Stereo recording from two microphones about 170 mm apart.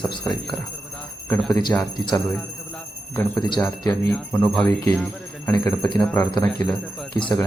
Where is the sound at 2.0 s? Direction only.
20° left (ahead or behind).